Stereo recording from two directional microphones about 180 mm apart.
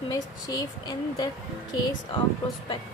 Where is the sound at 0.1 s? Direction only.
20° left (ahead or behind).